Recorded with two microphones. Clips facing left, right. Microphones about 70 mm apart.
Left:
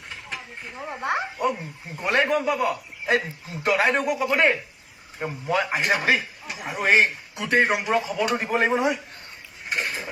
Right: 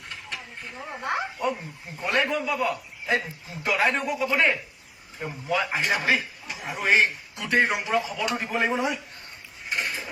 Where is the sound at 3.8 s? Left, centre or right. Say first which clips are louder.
Left 1 dB; centre.